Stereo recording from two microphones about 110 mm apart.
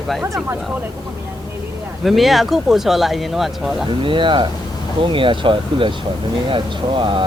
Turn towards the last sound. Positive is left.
turn(degrees=-45)  # may be behind; listen again after turning